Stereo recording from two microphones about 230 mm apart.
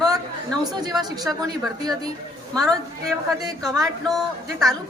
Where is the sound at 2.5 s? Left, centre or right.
Centre.